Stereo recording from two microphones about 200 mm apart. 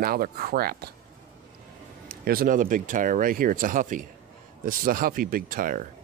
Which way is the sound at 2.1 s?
50° right (ahead or behind).